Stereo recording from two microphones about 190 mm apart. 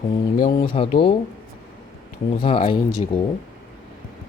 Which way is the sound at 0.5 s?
30° left (ahead or behind).